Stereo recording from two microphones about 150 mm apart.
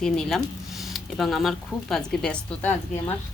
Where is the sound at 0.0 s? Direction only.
5° left (ahead or behind).